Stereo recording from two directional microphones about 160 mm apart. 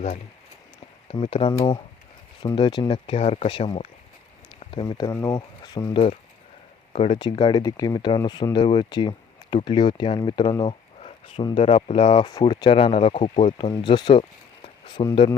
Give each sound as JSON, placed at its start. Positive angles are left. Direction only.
{"t": 1.1, "sound": "speech", "side_deg": 35}
{"t": 2.6, "sound": "speech", "side_deg": 30}
{"t": 4.7, "sound": "speech", "side_deg": 30}
{"t": 6.9, "sound": "speech", "side_deg": 35}